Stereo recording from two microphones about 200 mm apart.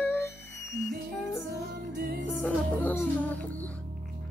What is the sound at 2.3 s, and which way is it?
Music, 5° left (ahead or behind).